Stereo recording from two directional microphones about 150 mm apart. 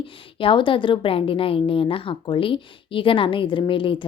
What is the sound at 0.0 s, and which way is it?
A woman's voice, 35° left (ahead or behind).